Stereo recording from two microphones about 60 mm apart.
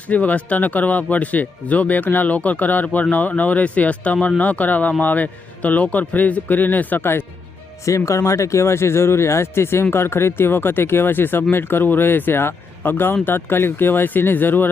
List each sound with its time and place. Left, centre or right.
0.1 s speech: left
7.9 s speech: left